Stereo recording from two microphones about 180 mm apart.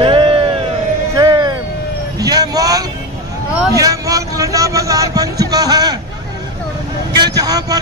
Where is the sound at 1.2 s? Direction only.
20° right (ahead or behind).